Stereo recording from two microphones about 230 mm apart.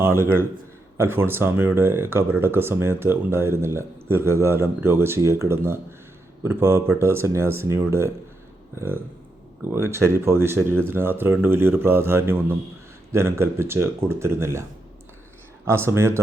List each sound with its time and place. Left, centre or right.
0.0 s speech: centre
9.7 s speech: centre
15.6 s speech: centre